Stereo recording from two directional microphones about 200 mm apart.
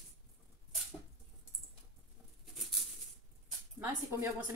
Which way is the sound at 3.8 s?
15° right (ahead or behind).